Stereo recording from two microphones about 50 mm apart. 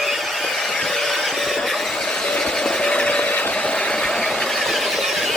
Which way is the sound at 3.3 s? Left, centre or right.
Left.